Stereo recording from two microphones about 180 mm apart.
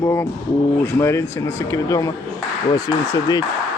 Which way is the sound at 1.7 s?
20° left (ahead or behind).